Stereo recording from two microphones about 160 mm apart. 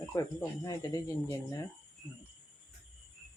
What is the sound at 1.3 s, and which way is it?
Speech, 20° left (ahead or behind).